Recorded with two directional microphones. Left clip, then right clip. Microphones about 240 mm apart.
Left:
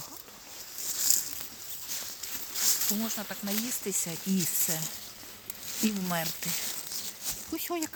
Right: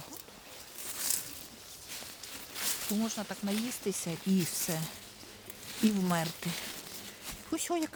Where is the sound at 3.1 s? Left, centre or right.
Centre.